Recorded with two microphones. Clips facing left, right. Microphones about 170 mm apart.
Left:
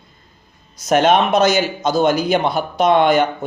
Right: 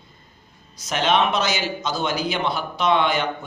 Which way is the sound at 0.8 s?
50° left (ahead or behind).